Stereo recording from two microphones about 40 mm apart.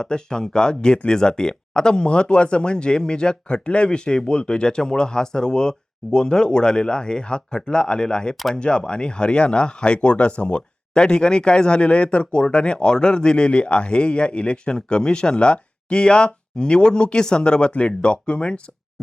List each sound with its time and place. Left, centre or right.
0.0 s speech: centre